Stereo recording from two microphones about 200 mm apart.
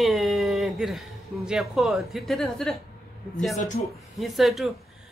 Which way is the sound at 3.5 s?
40° left (ahead or behind).